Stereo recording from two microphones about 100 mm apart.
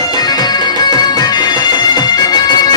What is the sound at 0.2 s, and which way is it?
Music, 45° left (ahead or behind).